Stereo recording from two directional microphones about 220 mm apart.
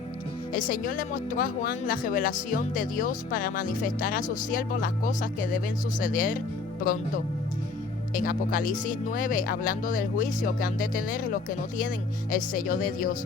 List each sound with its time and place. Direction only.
0.5 s speech: 40° left (ahead or behind)
8.1 s speech: 40° left (ahead or behind)